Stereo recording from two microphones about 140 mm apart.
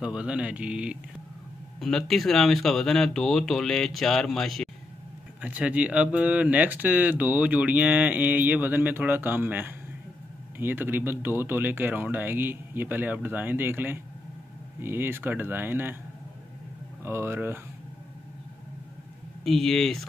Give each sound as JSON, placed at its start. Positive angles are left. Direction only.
{"t": 0.0, "sound": "speech", "side_deg": -10}
{"t": 1.8, "sound": "speech", "side_deg": 5}
{"t": 5.4, "sound": "speech", "side_deg": -10}
{"t": 17.0, "sound": "speech", "side_deg": -15}
{"t": 19.4, "sound": "speech", "side_deg": 0}